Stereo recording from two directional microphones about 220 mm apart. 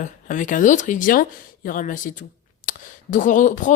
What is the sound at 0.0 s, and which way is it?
Speech, 35° left (ahead or behind).